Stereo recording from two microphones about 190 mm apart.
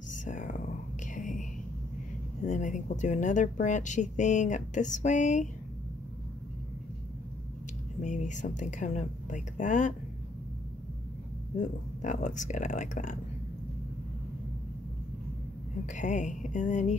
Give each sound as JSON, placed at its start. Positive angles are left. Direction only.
{"t": 0.1, "sound": "whispering", "side_deg": 40}
{"t": 2.4, "sound": "speech", "side_deg": 40}
{"t": 8.0, "sound": "speech", "side_deg": 40}
{"t": 11.5, "sound": "speech", "side_deg": 40}
{"t": 15.9, "sound": "speech", "side_deg": 40}